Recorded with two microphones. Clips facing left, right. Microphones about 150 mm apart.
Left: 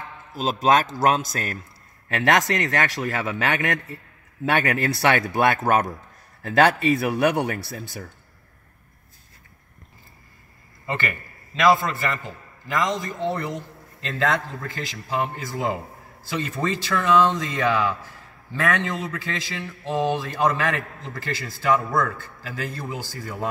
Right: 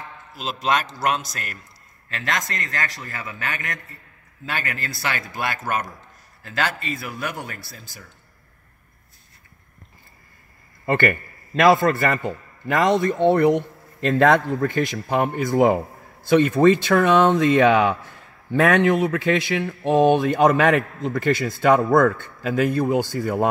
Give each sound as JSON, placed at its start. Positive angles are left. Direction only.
{"t": 0.4, "sound": "a man's voice", "side_deg": 40}
{"t": 2.1, "sound": "a man's voice", "side_deg": 65}
{"t": 4.5, "sound": "speech", "side_deg": 70}
{"t": 10.9, "sound": "a man's voice", "side_deg": -50}